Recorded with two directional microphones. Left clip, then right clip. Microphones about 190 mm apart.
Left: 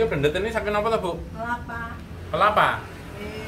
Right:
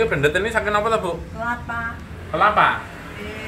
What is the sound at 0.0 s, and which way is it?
Speech, 5° right (ahead or behind).